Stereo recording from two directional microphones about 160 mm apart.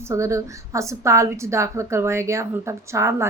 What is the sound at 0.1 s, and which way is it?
A woman's voice, 20° right (ahead or behind).